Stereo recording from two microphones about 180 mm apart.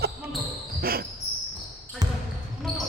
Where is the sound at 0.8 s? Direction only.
55° right (ahead or behind).